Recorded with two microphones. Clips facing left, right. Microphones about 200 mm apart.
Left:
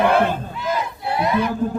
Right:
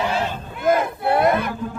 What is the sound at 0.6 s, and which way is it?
Battle cry, 55° right (ahead or behind).